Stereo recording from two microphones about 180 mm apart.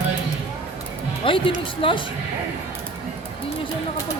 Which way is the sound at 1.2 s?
30° left (ahead or behind).